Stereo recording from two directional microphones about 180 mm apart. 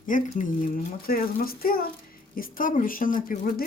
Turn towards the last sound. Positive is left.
turn(degrees=50)  # may be behind; listen again after turning